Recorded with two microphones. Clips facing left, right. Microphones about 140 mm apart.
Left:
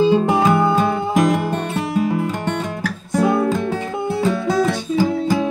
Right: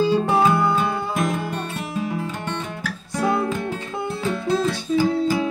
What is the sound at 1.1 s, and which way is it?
Music, 80° left.